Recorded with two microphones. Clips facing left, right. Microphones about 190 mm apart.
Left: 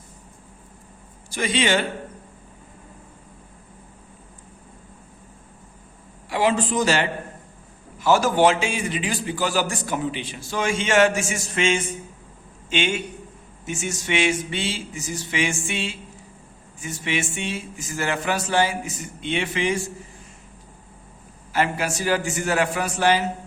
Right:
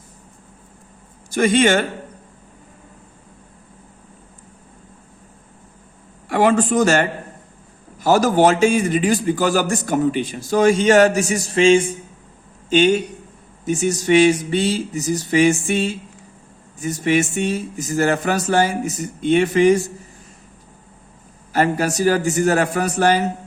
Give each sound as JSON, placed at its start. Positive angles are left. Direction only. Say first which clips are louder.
{"t": 1.3, "sound": "speech", "louder": "right 7 dB", "side_deg": -45}
{"t": 6.2, "sound": "a man's voice", "louder": "right 5 dB", "side_deg": -55}
{"t": 21.5, "sound": "a man's voice", "louder": "right 5 dB", "side_deg": -40}